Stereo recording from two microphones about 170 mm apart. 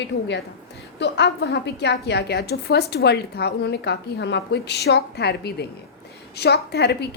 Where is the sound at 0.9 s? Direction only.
85° left.